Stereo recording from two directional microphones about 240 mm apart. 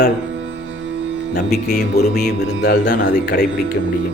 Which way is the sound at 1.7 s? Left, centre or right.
Left.